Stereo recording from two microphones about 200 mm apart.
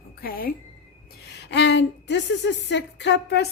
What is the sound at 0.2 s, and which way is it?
Speech, 45° left (ahead or behind).